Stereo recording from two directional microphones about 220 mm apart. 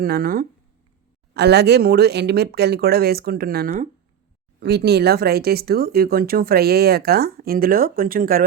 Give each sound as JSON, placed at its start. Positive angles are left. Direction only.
{"t": 0.0, "sound": "speech", "side_deg": -40}